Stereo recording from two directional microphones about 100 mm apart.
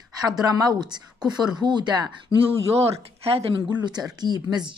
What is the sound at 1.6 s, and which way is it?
Speech, 50° right (ahead or behind).